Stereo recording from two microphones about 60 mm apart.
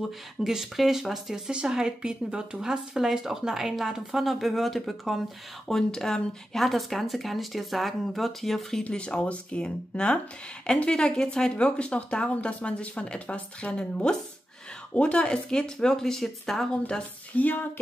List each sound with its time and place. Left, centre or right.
0.4 s speech: centre
8.8 s speech: centre
16.7 s speech: centre